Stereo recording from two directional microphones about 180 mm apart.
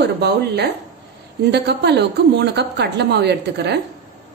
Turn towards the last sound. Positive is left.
turn(degrees=-70)  # may be behind; listen again after turning